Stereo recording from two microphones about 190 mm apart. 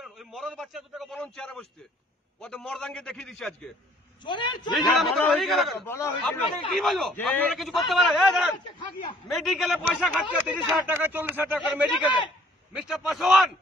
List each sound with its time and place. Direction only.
0.0 s a man's voice: centre (ahead or behind)
4.2 s a man's voice: 25° left (ahead or behind)
4.7 s a man's voice: centre (ahead or behind)
5.9 s a man's voice: 15° left (ahead or behind)